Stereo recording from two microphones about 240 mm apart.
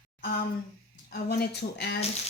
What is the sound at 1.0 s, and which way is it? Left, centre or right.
Speech, left.